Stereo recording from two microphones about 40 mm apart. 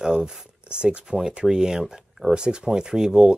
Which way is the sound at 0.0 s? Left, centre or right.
Right.